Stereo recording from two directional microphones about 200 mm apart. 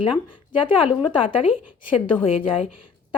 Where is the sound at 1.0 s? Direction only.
25° left (ahead or behind).